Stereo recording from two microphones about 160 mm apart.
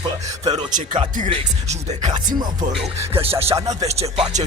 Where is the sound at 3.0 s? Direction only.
35° right (ahead or behind).